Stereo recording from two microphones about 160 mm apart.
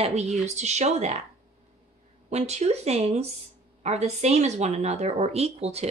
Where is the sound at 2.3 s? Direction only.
45° right (ahead or behind).